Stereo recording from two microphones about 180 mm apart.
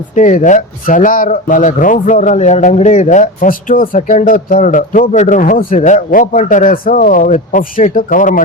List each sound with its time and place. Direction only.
0.1 s speech: 45° left (ahead or behind)